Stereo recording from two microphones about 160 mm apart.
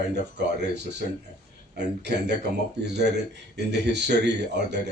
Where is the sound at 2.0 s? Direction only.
90° right.